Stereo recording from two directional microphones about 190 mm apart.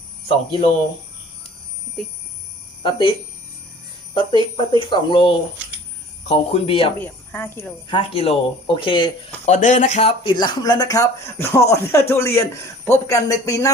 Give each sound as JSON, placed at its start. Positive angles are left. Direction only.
{"t": 2.8, "sound": "speech", "side_deg": 25}
{"t": 7.0, "sound": "speech", "side_deg": 10}
{"t": 7.9, "sound": "speech", "side_deg": 30}
{"t": 9.5, "sound": "speech", "side_deg": 40}